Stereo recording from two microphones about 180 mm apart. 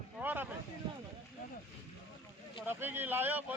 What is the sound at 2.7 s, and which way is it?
Speech, 10° right (ahead or behind).